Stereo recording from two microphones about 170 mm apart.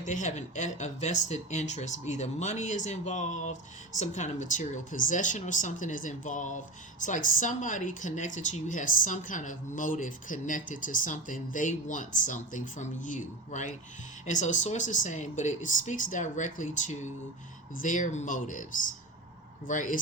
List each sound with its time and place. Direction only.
0.0 s speech: 45° left (ahead or behind)
19.6 s speech: 50° left (ahead or behind)